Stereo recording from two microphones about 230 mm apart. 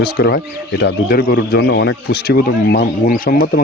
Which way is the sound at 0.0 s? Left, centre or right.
Left.